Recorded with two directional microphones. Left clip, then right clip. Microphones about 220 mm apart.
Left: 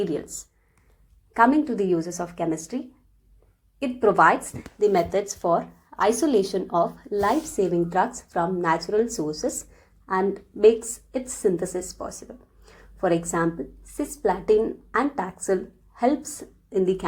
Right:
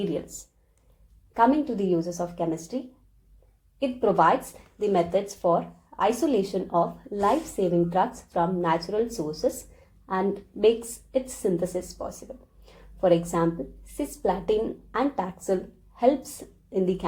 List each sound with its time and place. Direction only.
0.0 s a woman's voice: 30° left (ahead or behind)
12.6 s a sound: 30° left (ahead or behind)
13.9 s a woman's voice: 30° left (ahead or behind)
16.6 s a woman's voice: 30° left (ahead or behind)